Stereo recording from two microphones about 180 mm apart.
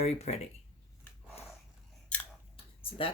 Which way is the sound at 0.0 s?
35° left (ahead or behind).